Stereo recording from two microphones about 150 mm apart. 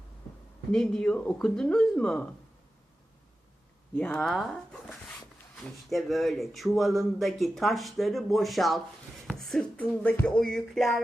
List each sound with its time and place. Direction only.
0.7 s speech: 5° left (ahead or behind)
4.1 s speech: centre (ahead or behind)